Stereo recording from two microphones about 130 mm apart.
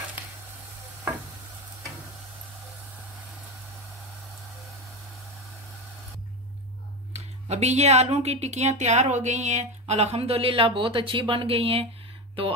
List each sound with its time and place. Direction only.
7.1 s speech: 60° right (ahead or behind)